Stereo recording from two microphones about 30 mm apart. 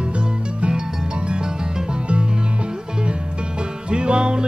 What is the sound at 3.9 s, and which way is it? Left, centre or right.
Music, right.